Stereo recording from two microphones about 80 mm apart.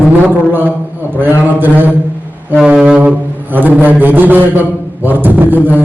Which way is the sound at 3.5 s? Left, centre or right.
Right.